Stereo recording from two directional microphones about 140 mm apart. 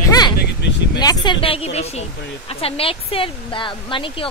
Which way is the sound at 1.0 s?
30° left (ahead or behind).